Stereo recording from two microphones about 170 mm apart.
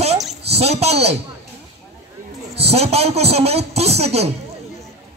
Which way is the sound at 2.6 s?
35° right (ahead or behind).